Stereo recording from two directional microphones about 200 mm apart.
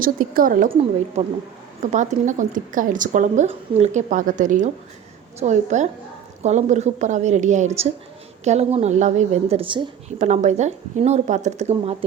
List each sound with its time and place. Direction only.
0.0 s a woman's voice: 45° right (ahead or behind)
1.9 s a woman's voice: 40° right (ahead or behind)
10.2 s a woman's voice: 35° right (ahead or behind)